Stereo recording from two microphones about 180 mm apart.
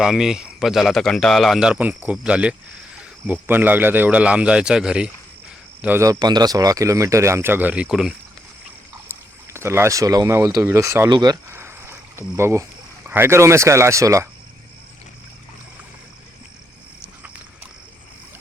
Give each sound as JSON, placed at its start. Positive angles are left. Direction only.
{"t": 0.0, "sound": "speech", "side_deg": -5}